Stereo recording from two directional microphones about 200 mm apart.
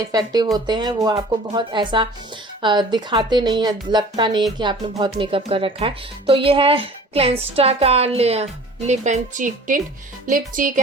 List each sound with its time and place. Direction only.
0.0 s a woman's voice: 20° right (ahead or behind); by 10.8 s 45° right (ahead or behind)